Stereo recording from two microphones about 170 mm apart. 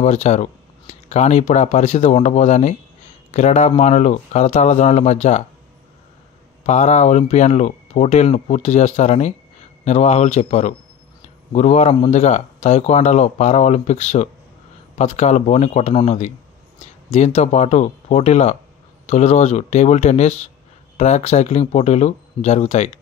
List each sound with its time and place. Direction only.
0.0 s speech: 40° left (ahead or behind)
6.6 s speech: 45° left (ahead or behind)